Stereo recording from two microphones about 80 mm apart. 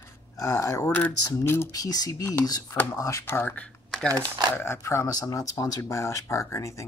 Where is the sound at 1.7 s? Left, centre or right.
Left.